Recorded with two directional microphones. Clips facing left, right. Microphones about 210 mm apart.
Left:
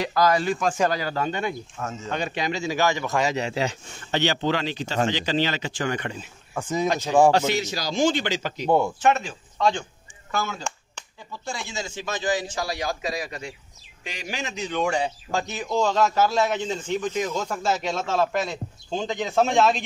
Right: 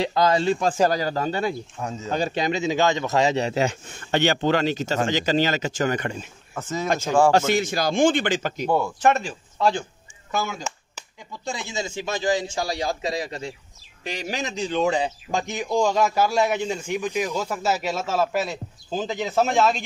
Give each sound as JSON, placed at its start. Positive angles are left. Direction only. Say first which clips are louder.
{"t": 0.0, "sound": "a man's voice", "louder": "right 1 dB", "side_deg": -25}
{"t": 2.4, "sound": "a man's voice", "louder": "right 2 dB", "side_deg": -20}
{"t": 6.5, "sound": "speech", "louder": "left 3 dB", "side_deg": 15}
{"t": 6.9, "sound": "a man's voice", "louder": "even", "side_deg": -45}
{"t": 8.6, "sound": "speech", "louder": "left 3 dB", "side_deg": 20}
{"t": 9.6, "sound": "a man's voice", "louder": "right 1 dB", "side_deg": -5}
{"t": 14.0, "sound": "a man's voice", "louder": "right 4 dB", "side_deg": -40}